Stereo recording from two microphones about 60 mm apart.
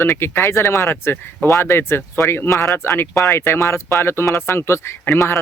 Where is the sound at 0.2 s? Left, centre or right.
Left.